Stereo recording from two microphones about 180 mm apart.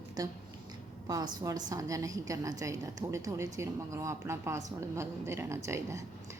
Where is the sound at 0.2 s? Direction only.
20° right (ahead or behind).